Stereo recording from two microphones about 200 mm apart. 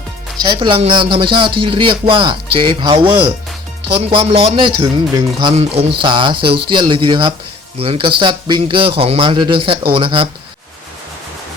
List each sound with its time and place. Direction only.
0.4 s speech: 25° right (ahead or behind)